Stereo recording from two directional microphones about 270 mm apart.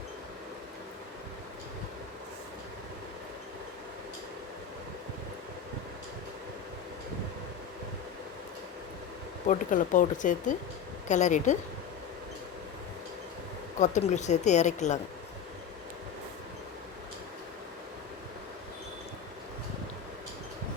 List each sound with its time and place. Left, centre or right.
9.5 s speech: left
13.7 s speech: left